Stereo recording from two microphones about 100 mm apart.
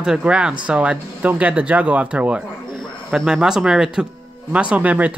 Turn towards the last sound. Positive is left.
turn(degrees=-15)  # may be behind; listen again after turning